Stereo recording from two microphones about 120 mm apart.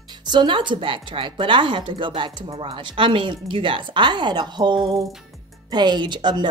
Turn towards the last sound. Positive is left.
turn(degrees=-40)  # may be behind; listen again after turning